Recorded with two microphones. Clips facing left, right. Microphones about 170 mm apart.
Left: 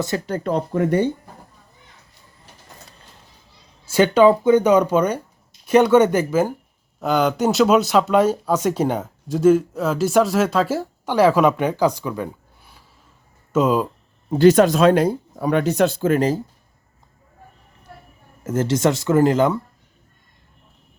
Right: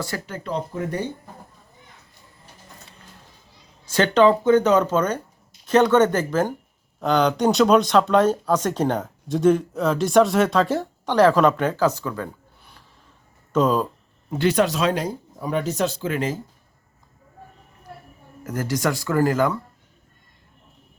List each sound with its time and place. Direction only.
0.3 s speech: 45° left (ahead or behind); by 0.9 s 65° left (ahead or behind)
3.8 s speech: 10° left (ahead or behind)
13.5 s speech: 10° left (ahead or behind)
14.3 s speech: 40° left (ahead or behind)
18.4 s speech: 25° left (ahead or behind)